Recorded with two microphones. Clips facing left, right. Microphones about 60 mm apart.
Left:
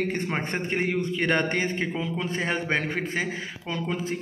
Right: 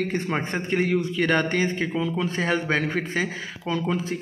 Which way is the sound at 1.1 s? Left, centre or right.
Left.